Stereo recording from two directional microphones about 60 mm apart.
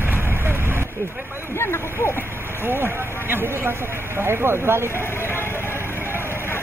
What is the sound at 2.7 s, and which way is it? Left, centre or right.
Speech, right.